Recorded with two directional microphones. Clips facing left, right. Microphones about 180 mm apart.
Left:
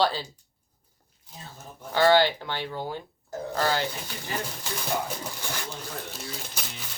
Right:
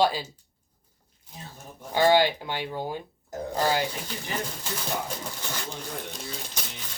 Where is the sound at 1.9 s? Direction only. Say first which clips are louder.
Even; 15° right (ahead or behind).